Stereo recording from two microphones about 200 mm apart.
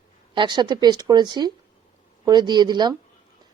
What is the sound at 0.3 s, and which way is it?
Speech, 20° right (ahead or behind).